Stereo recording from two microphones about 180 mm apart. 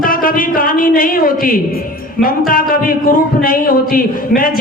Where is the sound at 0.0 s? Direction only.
50° left (ahead or behind).